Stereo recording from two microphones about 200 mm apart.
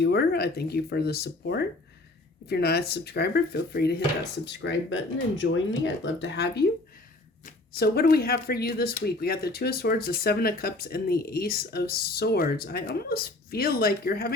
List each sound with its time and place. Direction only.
0.0 s speech: 55° left (ahead or behind)